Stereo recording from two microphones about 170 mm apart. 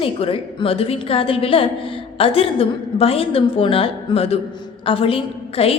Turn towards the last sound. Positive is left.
turn(degrees=35)  # may be behind; listen again after turning